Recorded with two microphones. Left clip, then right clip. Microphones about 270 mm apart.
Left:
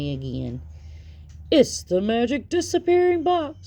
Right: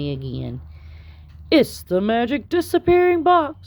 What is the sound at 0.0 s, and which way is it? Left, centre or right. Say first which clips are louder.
Speech: right 2 dB; right.